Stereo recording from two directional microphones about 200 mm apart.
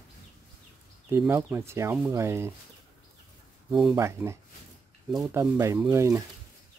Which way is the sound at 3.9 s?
15° right (ahead or behind).